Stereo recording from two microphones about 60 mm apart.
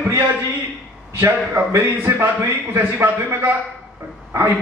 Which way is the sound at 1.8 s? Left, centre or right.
Right.